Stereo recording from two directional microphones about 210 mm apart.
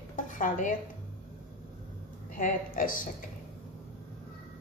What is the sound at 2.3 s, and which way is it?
Speech, 40° left (ahead or behind).